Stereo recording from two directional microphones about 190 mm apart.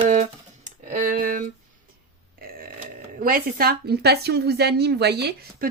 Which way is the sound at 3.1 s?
50° right (ahead or behind).